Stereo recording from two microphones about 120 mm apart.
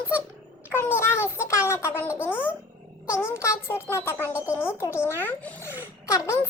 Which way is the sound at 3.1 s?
20° left (ahead or behind).